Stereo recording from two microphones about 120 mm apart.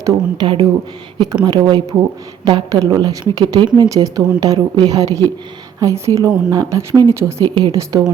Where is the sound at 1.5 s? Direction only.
35° right (ahead or behind).